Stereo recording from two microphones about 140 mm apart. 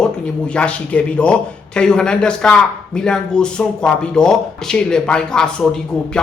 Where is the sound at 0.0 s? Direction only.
5° left (ahead or behind).